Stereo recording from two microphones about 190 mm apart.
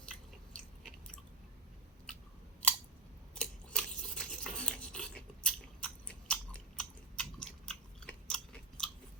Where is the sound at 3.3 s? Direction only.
5° left (ahead or behind).